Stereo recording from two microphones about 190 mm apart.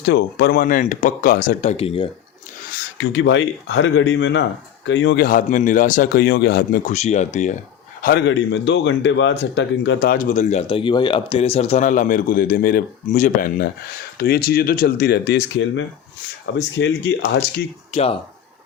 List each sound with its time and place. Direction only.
0.0 s a man's voice: 60° left (ahead or behind)
1.7 s a man's voice: 30° left (ahead or behind)
3.0 s speech: 70° left (ahead or behind)
5.2 s a man's voice: 45° left (ahead or behind)
6.9 s a man's voice: 35° left (ahead or behind)
8.0 s a man's voice: 65° left (ahead or behind); by 10.6 s 45° left (ahead or behind)
10.7 s a man's voice: 25° left (ahead or behind); by 17.6 s 65° left (ahead or behind)
17.9 s a man's voice: 30° left (ahead or behind)